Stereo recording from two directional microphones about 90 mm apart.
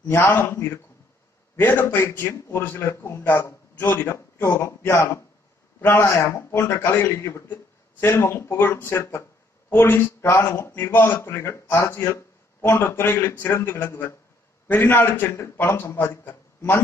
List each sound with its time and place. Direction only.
0.1 s a man's voice: 25° left (ahead or behind)